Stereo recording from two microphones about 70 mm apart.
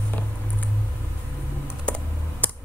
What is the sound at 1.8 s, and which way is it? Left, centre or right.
Computer keyboard, centre.